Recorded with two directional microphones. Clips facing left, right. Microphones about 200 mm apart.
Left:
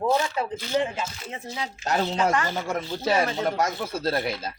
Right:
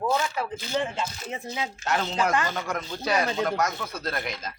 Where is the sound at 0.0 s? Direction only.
25° left (ahead or behind).